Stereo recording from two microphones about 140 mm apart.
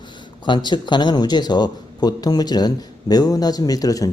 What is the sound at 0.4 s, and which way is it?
Speech, 35° left (ahead or behind).